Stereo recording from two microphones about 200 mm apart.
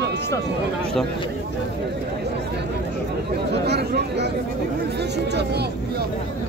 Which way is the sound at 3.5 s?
55° right (ahead or behind).